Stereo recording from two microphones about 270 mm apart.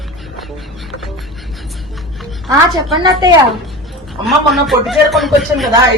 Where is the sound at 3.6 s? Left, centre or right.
Centre.